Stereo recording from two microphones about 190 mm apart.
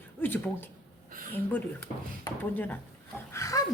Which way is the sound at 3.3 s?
15° left (ahead or behind).